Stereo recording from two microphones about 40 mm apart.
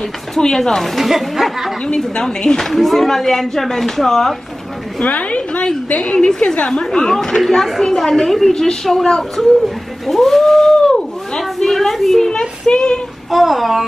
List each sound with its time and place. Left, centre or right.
0.4 s a woman's voice: centre
2.1 s a woman's voice: centre
2.7 s a woman's voice: centre
5.0 s a woman's voice: left; by 9.5 s centre
9.6 s a sound: centre
12.3 s speech: centre
13.3 s a woman's voice: centre